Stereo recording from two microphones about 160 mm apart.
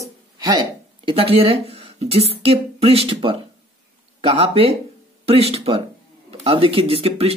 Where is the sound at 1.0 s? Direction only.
35° right (ahead or behind).